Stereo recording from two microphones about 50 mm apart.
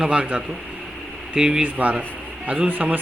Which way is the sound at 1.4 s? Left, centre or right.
Centre.